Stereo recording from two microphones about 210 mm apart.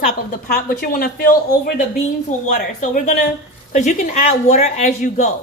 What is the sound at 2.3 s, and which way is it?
A woman's voice, 35° left (ahead or behind).